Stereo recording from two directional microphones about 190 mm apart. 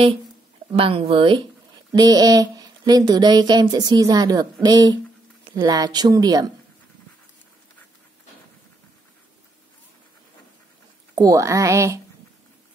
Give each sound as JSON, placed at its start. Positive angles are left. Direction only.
{"t": 0.7, "sound": "speech", "side_deg": -30}
{"t": 11.1, "sound": "a woman's voice", "side_deg": -15}